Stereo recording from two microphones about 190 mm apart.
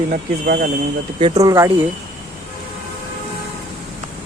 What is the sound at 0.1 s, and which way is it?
Speech, 50° right (ahead or behind).